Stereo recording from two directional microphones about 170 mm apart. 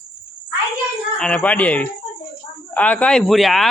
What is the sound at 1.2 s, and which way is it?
A man's voice, 5° left (ahead or behind).